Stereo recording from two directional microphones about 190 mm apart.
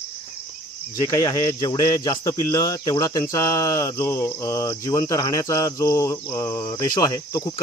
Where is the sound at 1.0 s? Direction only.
15° left (ahead or behind).